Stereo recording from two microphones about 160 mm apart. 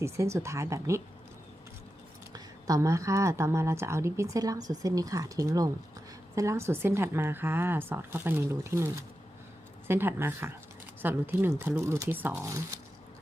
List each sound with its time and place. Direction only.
0.0 s speech: 20° right (ahead or behind)
2.3 s a woman's voice: 20° right (ahead or behind)